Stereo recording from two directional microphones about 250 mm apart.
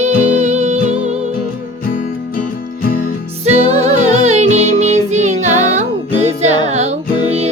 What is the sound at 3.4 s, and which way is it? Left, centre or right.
Music, right.